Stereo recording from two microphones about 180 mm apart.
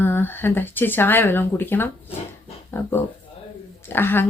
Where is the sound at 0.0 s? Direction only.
10° left (ahead or behind).